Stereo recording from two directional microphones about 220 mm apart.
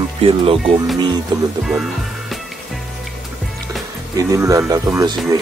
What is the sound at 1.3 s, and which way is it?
Music, 20° right (ahead or behind).